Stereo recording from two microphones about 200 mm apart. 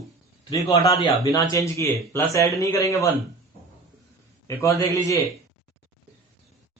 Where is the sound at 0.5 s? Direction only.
15° left (ahead or behind).